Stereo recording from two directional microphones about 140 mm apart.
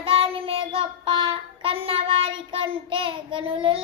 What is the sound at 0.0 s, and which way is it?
Child singing, 40° right (ahead or behind).